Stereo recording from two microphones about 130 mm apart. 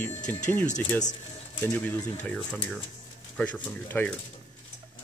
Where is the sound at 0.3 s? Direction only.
15° left (ahead or behind).